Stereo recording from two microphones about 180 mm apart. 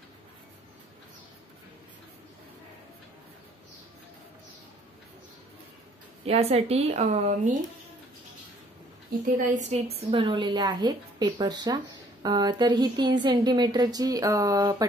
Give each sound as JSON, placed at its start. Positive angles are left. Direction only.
{"t": 6.2, "sound": "a woman's voice", "side_deg": -35}
{"t": 9.5, "sound": "a woman's voice", "side_deg": -40}